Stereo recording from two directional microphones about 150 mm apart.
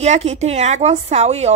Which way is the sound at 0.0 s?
50° right (ahead or behind).